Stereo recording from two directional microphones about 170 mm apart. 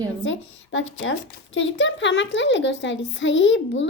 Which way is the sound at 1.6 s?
90° left.